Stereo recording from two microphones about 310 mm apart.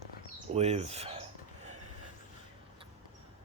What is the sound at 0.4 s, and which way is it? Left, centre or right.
Speech, centre.